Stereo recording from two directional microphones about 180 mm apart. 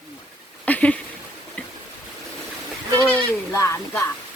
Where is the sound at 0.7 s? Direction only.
10° left (ahead or behind).